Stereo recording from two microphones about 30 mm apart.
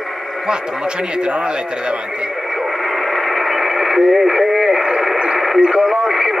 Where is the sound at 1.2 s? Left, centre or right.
Right.